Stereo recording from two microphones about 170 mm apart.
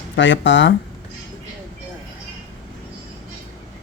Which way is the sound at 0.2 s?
90° left.